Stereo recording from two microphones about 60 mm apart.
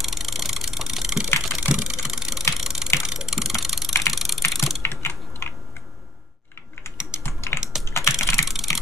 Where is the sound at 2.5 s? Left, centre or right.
Centre.